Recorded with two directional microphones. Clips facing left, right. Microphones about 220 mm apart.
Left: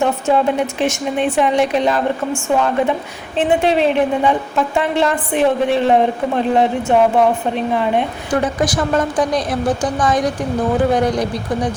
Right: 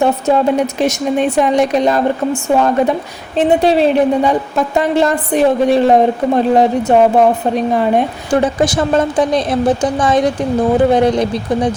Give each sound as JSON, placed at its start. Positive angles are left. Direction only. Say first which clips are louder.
{"t": 0.0, "sound": "a woman's voice", "louder": "right 3 dB", "side_deg": -40}
{"t": 8.3, "sound": "a woman's voice", "louder": "right 4 dB", "side_deg": -25}